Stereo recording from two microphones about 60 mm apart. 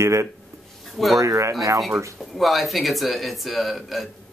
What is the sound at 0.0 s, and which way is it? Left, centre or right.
Speech, right.